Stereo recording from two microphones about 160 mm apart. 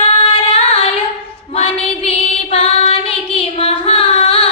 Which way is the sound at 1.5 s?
35° left (ahead or behind).